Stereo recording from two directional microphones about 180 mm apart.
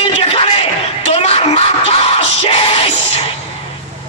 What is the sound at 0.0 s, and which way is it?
Music, 30° left (ahead or behind).